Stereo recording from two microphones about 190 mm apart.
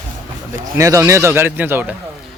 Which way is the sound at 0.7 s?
15° right (ahead or behind).